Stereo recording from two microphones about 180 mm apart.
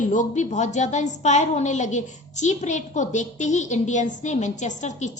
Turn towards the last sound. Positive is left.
turn(degrees=40)  # may be behind; listen again after turning